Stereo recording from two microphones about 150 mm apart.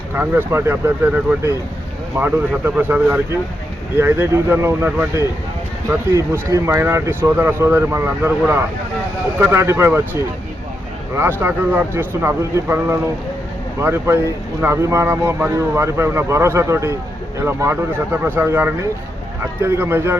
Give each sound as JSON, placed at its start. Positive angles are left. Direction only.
{"t": 0.2, "sound": "speech", "side_deg": -15}
{"t": 11.1, "sound": "speech", "side_deg": -15}